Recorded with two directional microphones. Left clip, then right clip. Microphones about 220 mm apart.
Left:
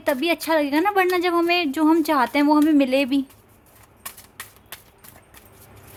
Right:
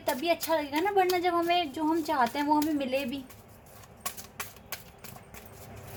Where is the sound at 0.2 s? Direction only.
40° left (ahead or behind).